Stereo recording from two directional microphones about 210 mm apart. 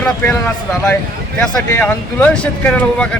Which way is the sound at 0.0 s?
5° left (ahead or behind).